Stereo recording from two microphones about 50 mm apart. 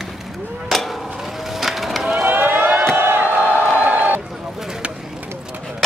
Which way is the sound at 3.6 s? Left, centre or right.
Right.